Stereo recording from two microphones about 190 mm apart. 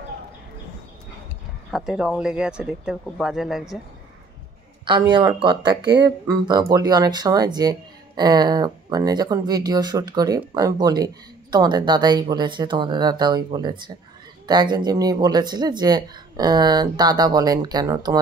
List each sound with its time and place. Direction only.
1.7 s speech: centre (ahead or behind)
4.8 s speech: 25° right (ahead or behind)